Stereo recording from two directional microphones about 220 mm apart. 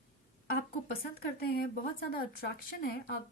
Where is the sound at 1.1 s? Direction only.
40° left (ahead or behind).